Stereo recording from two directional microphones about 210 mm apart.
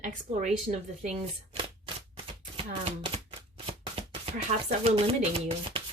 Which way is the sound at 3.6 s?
30° right (ahead or behind).